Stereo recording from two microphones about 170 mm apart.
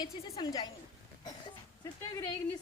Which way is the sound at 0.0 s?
25° left (ahead or behind).